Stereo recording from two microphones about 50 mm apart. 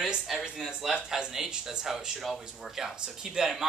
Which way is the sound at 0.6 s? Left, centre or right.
Centre.